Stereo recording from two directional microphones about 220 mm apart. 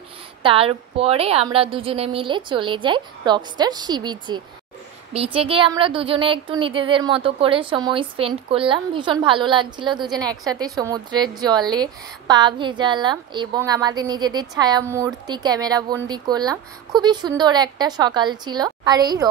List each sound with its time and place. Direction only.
0.4 s a woman's voice: 25° right (ahead or behind)